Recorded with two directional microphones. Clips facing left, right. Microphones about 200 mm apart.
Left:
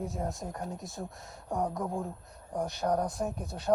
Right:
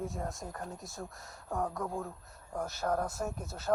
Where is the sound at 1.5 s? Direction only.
20° left (ahead or behind).